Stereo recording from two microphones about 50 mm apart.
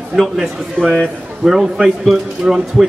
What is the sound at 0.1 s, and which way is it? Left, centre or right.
A man's voice, centre.